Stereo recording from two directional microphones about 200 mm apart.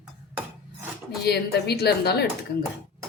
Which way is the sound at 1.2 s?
55° left (ahead or behind).